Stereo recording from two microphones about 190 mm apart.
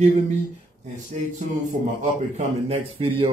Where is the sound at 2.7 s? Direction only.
30° right (ahead or behind).